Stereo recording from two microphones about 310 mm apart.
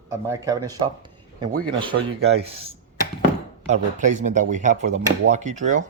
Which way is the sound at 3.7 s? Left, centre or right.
Right.